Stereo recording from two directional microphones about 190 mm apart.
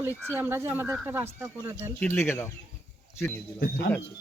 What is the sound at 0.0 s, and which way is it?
Speech, 10° right (ahead or behind).